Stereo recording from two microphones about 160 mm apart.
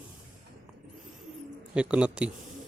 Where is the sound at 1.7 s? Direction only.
5° right (ahead or behind).